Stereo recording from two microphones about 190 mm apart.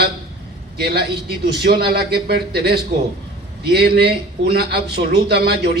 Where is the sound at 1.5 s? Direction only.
55° right (ahead or behind).